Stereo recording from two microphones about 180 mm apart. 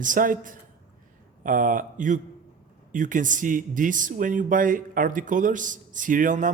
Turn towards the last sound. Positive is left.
turn(degrees=-45)  # may be behind; listen again after turning